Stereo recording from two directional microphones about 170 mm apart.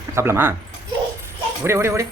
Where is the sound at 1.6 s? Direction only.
15° right (ahead or behind).